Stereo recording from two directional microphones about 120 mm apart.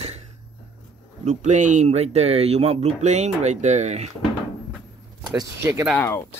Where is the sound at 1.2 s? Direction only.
80° right.